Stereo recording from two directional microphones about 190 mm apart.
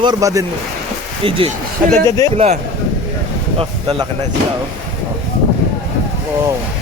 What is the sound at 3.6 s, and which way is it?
Speech, 25° right (ahead or behind).